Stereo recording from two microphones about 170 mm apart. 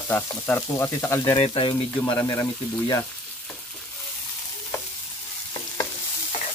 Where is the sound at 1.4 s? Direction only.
30° left (ahead or behind).